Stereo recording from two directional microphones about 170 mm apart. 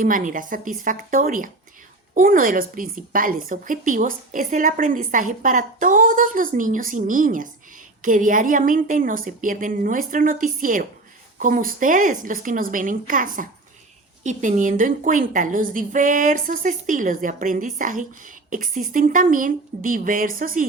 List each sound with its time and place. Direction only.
0.0 s a woman's voice: 50° right (ahead or behind)